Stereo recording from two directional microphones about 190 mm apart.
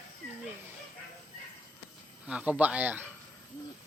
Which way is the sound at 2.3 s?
5° right (ahead or behind).